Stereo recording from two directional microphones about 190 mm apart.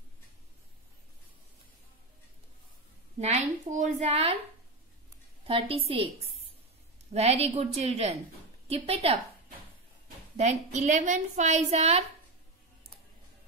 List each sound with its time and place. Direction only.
3.2 s a woman's voice: 35° right (ahead or behind)
5.5 s a woman's voice: 30° right (ahead or behind)
10.3 s a woman's voice: 35° right (ahead or behind)